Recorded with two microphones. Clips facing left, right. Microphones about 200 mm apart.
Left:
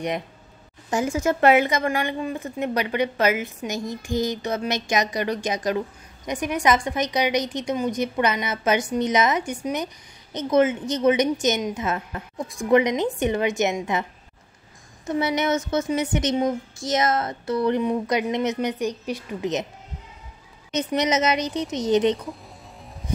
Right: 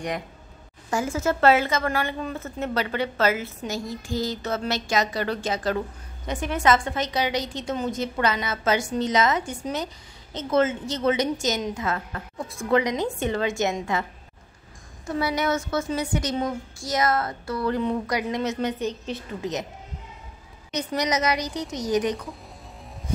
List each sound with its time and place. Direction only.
0.8 s a woman's voice: 20° left (ahead or behind)
15.0 s a woman's voice: 20° left (ahead or behind)
20.7 s a woman's voice: 20° left (ahead or behind)